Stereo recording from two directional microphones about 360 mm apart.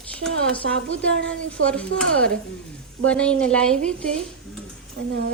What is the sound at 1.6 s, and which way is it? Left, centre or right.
A woman's voice, centre.